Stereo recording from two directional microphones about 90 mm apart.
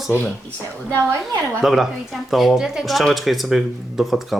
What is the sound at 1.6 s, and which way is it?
A child's voice, 5° right (ahead or behind).